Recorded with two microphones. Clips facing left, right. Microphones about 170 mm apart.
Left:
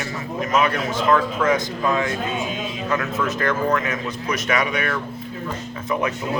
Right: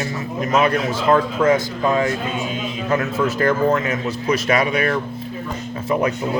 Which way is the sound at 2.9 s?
30° right (ahead or behind).